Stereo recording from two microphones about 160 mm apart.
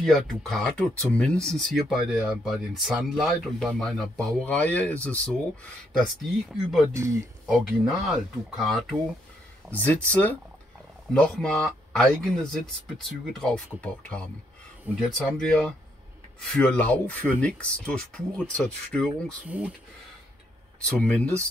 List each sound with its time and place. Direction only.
0.0 s speech: centre (ahead or behind)
6.9 s speech: 20° right (ahead or behind)
7.4 s speech: centre (ahead or behind)
10.0 s speech: 10° left (ahead or behind)
19.4 s speech: 10° right (ahead or behind)
20.8 s speech: 5° left (ahead or behind)